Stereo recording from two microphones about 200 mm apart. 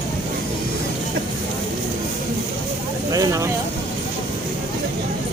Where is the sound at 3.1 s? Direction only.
15° right (ahead or behind).